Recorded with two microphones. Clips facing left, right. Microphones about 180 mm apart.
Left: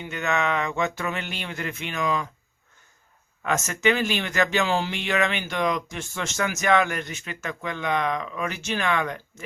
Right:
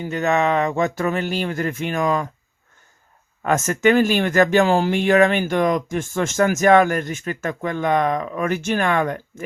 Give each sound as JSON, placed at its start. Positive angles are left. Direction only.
{"t": 0.0, "sound": "speech", "side_deg": -40}
{"t": 3.4, "sound": "speech", "side_deg": -50}